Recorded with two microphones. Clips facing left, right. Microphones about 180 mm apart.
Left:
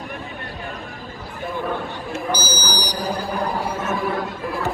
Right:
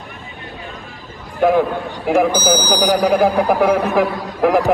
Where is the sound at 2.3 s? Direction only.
55° right (ahead or behind).